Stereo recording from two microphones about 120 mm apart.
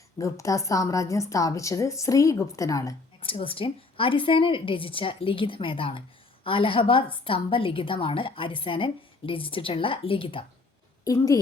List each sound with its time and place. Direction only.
0.2 s a woman's voice: 25° left (ahead or behind)
3.2 s a woman's voice: 50° left (ahead or behind)
11.0 s a woman's voice: 30° left (ahead or behind)